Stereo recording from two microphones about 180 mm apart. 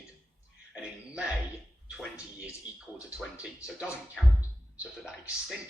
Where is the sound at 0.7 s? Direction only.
5° right (ahead or behind).